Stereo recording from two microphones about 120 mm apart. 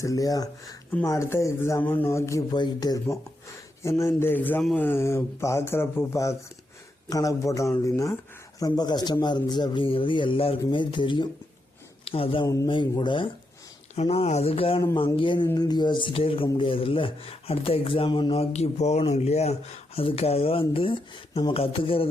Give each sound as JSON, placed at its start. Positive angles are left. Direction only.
{"t": 0.0, "sound": "speech", "side_deg": 30}
{"t": 2.5, "sound": "a woman's voice", "side_deg": 35}
{"t": 13.9, "sound": "speech", "side_deg": 65}